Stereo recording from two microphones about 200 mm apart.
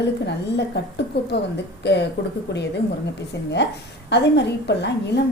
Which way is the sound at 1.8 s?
60° left (ahead or behind).